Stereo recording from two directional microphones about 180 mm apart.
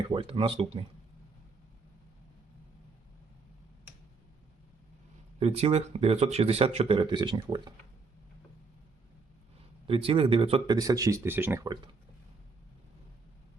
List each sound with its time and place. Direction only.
0.1 s speech: 30° right (ahead or behind)
5.4 s speech: 35° right (ahead or behind)
9.8 s speech: 30° right (ahead or behind)
10.8 s speech: 20° right (ahead or behind)